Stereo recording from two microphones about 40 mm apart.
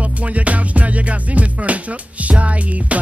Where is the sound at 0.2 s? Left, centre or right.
Right.